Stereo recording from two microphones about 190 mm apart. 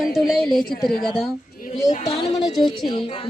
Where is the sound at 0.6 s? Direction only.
50° left (ahead or behind).